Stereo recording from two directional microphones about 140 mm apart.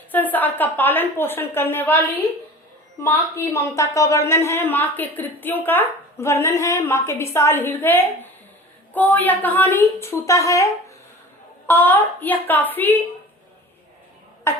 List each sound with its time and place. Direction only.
0.1 s a woman's voice: 10° left (ahead or behind)
3.0 s a woman's voice: 20° left (ahead or behind)
14.5 s cough: 20° left (ahead or behind)